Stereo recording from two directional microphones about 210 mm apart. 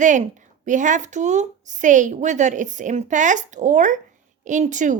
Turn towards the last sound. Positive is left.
turn(degrees=-35)  # may be behind; listen again after turning